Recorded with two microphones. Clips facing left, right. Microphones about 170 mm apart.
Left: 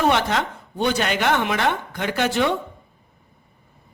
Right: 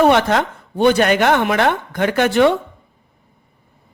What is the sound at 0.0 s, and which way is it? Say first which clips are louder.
Speech: right 6 dB; 55° right (ahead or behind).